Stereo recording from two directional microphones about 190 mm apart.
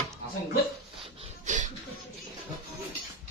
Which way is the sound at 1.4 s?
40° right (ahead or behind).